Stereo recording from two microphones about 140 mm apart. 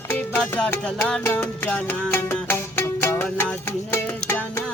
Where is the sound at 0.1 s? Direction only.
10° left (ahead or behind).